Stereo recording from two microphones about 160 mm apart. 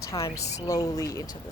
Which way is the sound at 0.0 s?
20° left (ahead or behind).